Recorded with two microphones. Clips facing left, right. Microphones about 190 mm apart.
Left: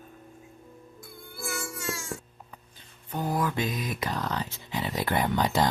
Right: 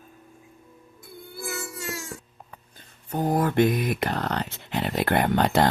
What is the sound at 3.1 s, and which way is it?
Speech, 50° right (ahead or behind).